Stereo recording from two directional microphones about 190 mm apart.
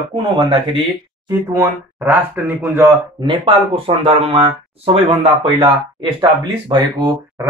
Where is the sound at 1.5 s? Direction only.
10° right (ahead or behind).